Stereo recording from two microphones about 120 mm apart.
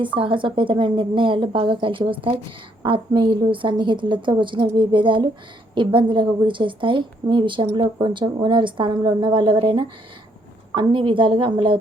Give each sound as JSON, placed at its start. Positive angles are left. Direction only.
{"t": 0.0, "sound": "a woman's voice", "side_deg": -45}